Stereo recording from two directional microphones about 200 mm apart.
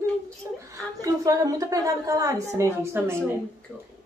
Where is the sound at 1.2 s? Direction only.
15° right (ahead or behind).